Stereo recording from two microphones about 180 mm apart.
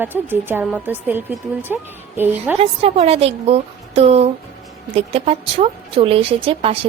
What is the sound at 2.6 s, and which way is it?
A woman's voice, 35° right (ahead or behind).